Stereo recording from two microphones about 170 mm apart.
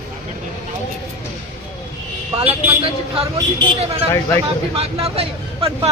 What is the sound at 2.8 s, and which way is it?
Speech, 35° right (ahead or behind).